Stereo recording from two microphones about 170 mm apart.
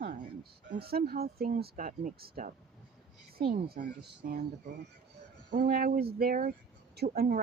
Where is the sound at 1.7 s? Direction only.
50° right (ahead or behind).